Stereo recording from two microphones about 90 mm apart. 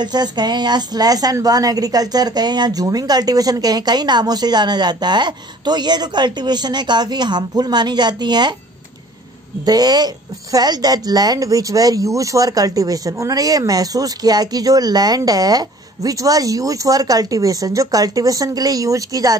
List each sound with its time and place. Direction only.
0.0 s speech: 50° right (ahead or behind)
9.7 s speech: 45° right (ahead or behind)